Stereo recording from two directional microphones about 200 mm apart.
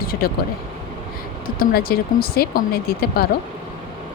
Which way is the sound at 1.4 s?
50° left (ahead or behind).